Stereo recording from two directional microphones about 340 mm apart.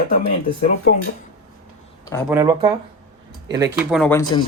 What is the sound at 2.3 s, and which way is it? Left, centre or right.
Speech, centre.